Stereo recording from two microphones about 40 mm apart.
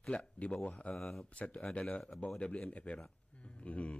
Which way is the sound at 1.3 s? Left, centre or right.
Left.